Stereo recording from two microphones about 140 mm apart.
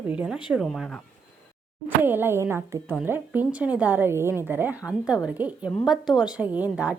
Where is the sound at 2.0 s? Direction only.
15° right (ahead or behind).